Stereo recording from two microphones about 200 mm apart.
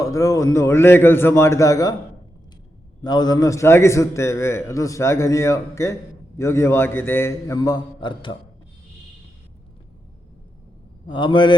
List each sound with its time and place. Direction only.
0.0 s a man's voice: 15° left (ahead or behind)
3.0 s a man's voice: 20° left (ahead or behind)
11.0 s a man's voice: 25° left (ahead or behind)